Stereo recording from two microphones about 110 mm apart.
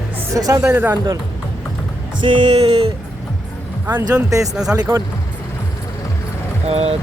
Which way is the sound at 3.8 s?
20° right (ahead or behind).